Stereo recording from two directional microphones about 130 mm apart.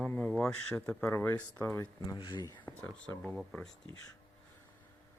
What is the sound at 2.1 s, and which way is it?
Speech, 35° left (ahead or behind).